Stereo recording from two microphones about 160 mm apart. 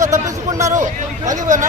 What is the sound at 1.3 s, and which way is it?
Speech, 50° right (ahead or behind).